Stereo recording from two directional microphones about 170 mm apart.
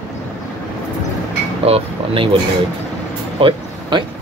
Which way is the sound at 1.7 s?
35° right (ahead or behind).